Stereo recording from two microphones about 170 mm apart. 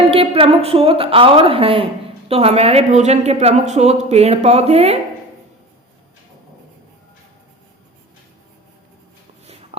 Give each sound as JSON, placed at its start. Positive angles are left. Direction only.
{"t": 0.1, "sound": "speech", "side_deg": -35}